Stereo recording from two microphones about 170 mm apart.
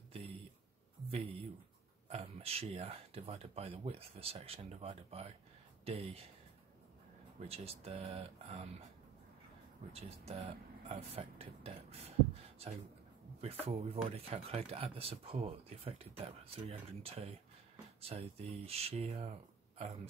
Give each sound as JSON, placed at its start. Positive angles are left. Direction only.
{"t": 0.1, "sound": "a sound", "side_deg": -35}
{"t": 1.1, "sound": "speech", "side_deg": -35}
{"t": 7.4, "sound": "speech", "side_deg": -35}
{"t": 9.9, "sound": "speech", "side_deg": -35}